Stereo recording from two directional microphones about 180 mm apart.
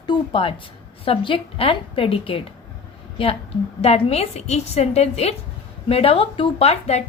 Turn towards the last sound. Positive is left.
turn(degrees=35)  # may be behind; listen again after turning